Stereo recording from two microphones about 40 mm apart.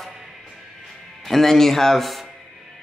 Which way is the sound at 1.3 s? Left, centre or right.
Centre.